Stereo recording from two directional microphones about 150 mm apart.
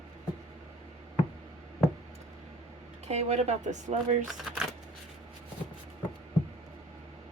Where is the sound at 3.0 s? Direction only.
45° right (ahead or behind).